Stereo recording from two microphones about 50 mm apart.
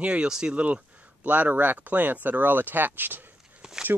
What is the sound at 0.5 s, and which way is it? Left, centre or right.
Speech, right.